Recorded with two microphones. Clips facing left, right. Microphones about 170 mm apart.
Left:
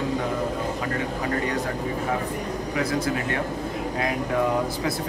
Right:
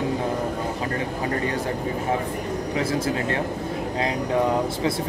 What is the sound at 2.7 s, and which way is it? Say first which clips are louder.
Speech: even; 30° right (ahead or behind).